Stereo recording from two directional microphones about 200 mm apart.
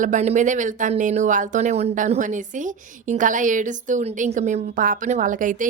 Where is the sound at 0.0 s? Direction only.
35° right (ahead or behind).